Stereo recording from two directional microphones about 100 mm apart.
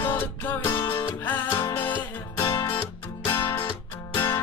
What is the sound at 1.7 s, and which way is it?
Music, 20° left (ahead or behind).